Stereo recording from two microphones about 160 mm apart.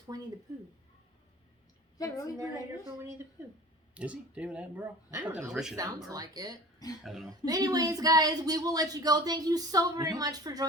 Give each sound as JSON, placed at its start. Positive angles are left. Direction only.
{"t": 0.1, "sound": "speech", "side_deg": -25}
{"t": 2.0, "sound": "a woman's voice", "side_deg": 20}
{"t": 3.9, "sound": "speech", "side_deg": -10}
{"t": 5.7, "sound": "speech", "side_deg": -20}
{"t": 6.7, "sound": "speech", "side_deg": 25}
{"t": 7.0, "sound": "speech", "side_deg": 0}
{"t": 7.4, "sound": "speech", "side_deg": -25}